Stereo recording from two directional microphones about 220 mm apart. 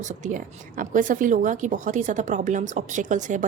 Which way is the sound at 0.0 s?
35° right (ahead or behind).